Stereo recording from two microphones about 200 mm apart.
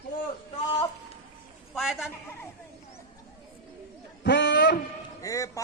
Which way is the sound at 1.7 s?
Centre (ahead or behind).